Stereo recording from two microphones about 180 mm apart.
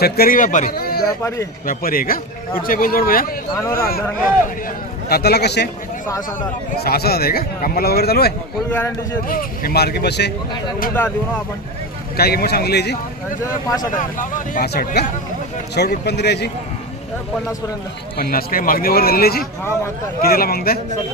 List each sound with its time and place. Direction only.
0.0 s a man's voice: 60° left (ahead or behind)
3.5 s a man's voice: 15° left (ahead or behind)
5.1 s speech: 65° left (ahead or behind)
6.8 s speech: 60° left (ahead or behind)
8.6 s a man's voice: 10° left (ahead or behind)
9.3 s speech: 55° left (ahead or behind)
12.2 s speech: 60° left (ahead or behind)
13.9 s a man's voice: 45° left (ahead or behind)
14.7 s speech: 60° left (ahead or behind)
18.1 s speech: 55° left (ahead or behind)